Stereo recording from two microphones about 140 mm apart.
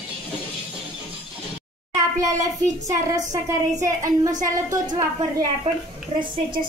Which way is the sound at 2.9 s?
25° right (ahead or behind).